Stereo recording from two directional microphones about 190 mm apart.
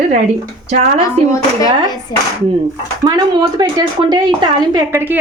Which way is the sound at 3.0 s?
20° right (ahead or behind).